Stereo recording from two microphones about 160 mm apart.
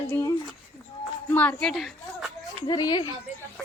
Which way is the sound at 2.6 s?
25° left (ahead or behind).